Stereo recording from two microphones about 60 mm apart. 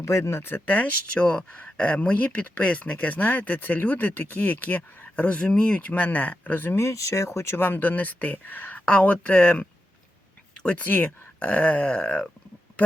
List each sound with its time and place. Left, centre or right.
0.0 s speech: left
0.7 s speech: left
6.7 s speech: left
10.8 s speech: left